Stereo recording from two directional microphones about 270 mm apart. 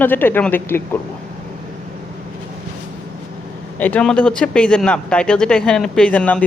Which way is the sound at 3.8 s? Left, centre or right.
Centre.